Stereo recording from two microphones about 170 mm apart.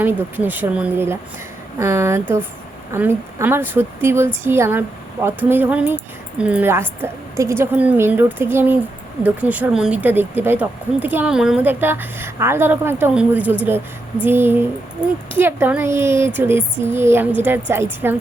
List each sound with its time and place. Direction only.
0.0 s speech: 10° right (ahead or behind)